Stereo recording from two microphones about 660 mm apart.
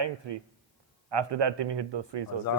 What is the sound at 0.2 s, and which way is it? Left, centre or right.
A man's voice, right.